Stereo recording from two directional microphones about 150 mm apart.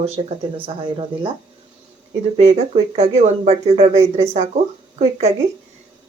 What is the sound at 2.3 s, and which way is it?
Speech, 45° right (ahead or behind).